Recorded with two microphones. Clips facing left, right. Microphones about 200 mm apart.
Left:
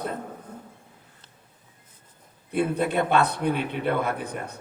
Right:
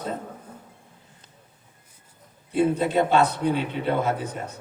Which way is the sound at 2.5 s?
60° left (ahead or behind).